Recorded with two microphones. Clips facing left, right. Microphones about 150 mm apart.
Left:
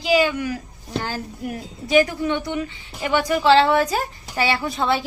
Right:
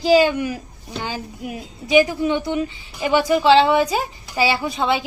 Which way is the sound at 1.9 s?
20° right (ahead or behind).